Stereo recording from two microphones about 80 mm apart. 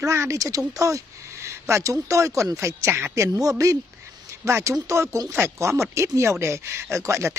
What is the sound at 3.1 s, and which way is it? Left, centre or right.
Speech, right.